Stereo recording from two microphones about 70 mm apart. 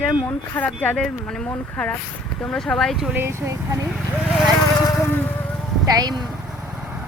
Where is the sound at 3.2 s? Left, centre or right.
Right.